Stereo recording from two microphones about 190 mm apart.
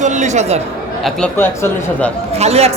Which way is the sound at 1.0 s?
5° left (ahead or behind).